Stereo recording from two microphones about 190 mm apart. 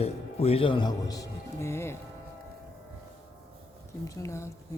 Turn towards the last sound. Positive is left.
turn(degrees=15)  # may be behind; listen again after turning